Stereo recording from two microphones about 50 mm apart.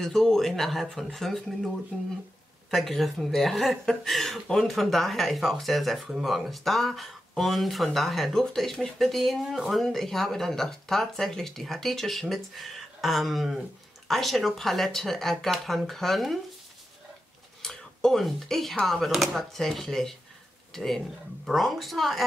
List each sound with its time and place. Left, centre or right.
0.0 s speech: centre
1.9 s speech: centre
2.7 s speech: centre
17.6 s a sound: centre
18.9 s speech: centre